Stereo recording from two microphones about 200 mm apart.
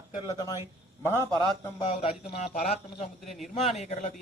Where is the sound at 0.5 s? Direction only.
10° right (ahead or behind).